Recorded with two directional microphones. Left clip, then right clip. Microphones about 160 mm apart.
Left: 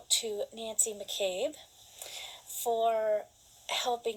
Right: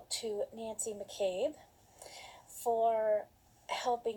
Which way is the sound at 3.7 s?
25° left (ahead or behind).